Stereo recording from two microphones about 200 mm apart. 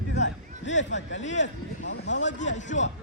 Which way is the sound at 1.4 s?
65° left (ahead or behind).